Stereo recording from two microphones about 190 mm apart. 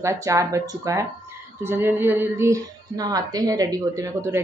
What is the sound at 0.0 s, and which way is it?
Speech, 15° right (ahead or behind).